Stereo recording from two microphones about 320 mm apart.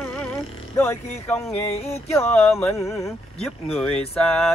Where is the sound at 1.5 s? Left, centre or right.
Centre.